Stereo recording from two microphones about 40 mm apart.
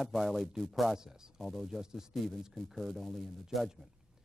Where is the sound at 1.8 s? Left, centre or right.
Centre.